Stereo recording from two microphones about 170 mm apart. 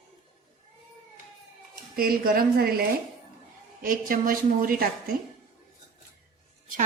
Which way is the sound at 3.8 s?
55° right (ahead or behind).